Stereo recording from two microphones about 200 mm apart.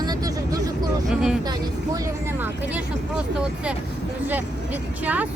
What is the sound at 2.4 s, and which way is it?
Speech, 5° right (ahead or behind).